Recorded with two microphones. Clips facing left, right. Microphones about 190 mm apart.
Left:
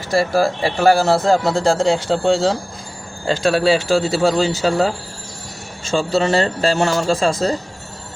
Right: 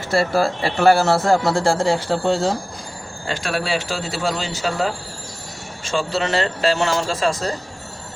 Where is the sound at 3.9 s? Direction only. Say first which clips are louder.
Left 8 dB; 40° left (ahead or behind).